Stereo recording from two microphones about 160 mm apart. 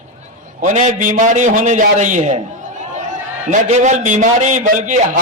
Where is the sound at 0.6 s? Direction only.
50° right (ahead or behind).